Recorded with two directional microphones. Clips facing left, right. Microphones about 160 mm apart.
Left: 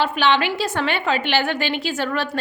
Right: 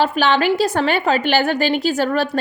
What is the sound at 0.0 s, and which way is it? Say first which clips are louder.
A woman's voice: right 3 dB; 40° right (ahead or behind).